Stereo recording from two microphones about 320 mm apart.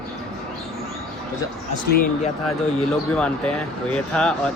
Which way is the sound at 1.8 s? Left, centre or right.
Left.